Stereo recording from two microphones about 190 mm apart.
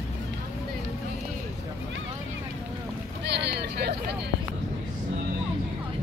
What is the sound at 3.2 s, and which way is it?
Vehicle, 60° right (ahead or behind).